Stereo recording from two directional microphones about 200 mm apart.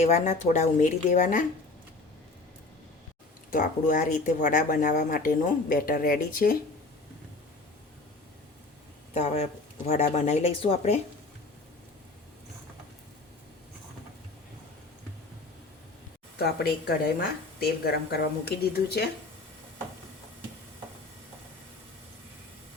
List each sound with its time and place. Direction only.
0.0 s speech: 35° left (ahead or behind)
3.5 s speech: 40° left (ahead or behind)
9.1 s speech: 30° left (ahead or behind)
16.4 s speech: 50° left (ahead or behind)